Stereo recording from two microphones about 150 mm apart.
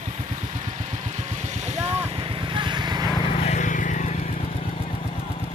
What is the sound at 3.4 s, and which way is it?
Vehicle, 55° left (ahead or behind).